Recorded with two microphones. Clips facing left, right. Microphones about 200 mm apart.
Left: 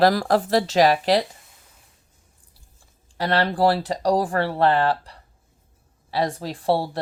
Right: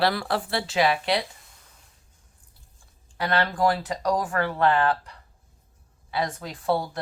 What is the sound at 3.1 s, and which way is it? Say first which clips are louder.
Speech: left 3 dB; 35° left (ahead or behind).